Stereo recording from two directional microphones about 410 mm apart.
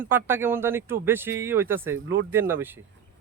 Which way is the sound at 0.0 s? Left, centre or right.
Centre.